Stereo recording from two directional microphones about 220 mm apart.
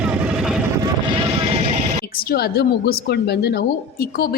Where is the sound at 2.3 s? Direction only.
45° left (ahead or behind).